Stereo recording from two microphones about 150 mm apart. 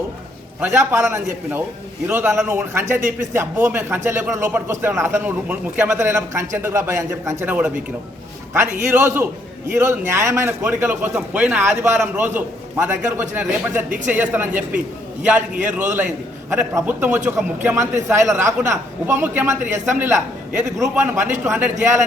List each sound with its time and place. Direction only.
0.6 s a man's voice: 15° right (ahead or behind)
16.5 s a man's voice: 15° right (ahead or behind)